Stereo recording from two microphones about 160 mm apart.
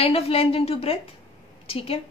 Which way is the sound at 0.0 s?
40° left (ahead or behind).